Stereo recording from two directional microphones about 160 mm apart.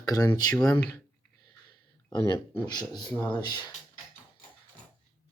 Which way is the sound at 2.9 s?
25° left (ahead or behind).